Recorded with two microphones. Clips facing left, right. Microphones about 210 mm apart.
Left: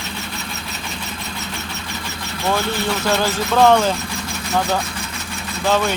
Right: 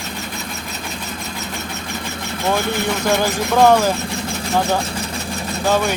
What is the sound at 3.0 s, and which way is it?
Speech, 15° right (ahead or behind).